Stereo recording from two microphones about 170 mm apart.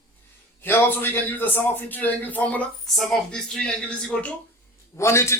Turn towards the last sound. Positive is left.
turn(degrees=15)  # may be behind; listen again after turning